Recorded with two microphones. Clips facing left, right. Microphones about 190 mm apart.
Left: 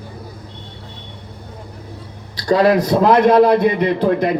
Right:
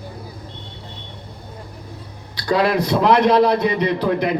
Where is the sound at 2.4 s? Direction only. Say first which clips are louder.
Left 4 dB; 45° left (ahead or behind).